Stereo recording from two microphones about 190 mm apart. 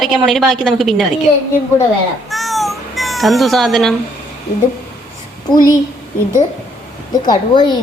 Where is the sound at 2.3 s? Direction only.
Centre (ahead or behind).